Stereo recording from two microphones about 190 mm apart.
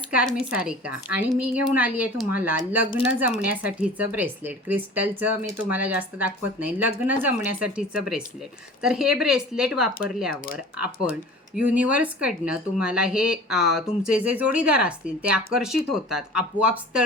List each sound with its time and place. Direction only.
0.1 s a woman's voice: 5° right (ahead or behind)
10.3 s speech: 50° left (ahead or behind)
11.5 s speech: 5° right (ahead or behind)